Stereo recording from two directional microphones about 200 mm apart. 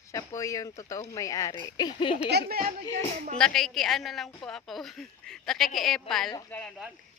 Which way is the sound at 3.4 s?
5° left (ahead or behind).